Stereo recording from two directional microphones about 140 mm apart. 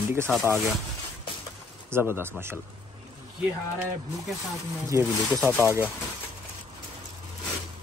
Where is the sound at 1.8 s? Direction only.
15° right (ahead or behind).